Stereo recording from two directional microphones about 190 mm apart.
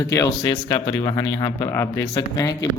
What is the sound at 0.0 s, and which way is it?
Speech, 15° left (ahead or behind).